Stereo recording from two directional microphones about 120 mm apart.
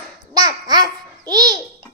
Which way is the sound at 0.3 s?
35° right (ahead or behind).